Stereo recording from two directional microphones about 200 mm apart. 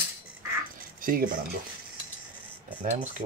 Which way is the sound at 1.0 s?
45° right (ahead or behind).